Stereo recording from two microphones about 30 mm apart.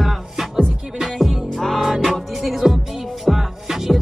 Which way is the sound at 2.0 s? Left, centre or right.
Centre.